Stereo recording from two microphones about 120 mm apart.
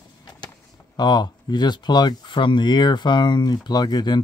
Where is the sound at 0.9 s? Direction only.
35° left (ahead or behind).